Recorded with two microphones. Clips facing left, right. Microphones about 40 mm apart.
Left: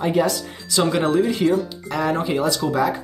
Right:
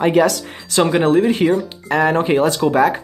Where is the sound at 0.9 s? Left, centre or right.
Right.